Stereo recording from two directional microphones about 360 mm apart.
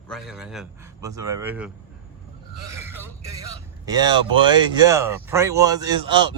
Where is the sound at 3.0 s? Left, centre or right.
Centre.